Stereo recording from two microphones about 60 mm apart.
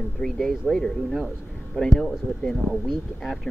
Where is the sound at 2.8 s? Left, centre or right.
Centre.